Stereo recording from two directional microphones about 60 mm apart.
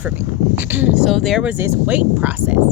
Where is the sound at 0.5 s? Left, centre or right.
Right.